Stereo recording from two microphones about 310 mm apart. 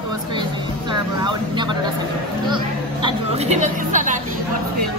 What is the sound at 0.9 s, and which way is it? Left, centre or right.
Speech, centre.